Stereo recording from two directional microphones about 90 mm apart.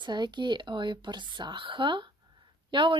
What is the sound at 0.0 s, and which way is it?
A woman's voice, 55° right (ahead or behind).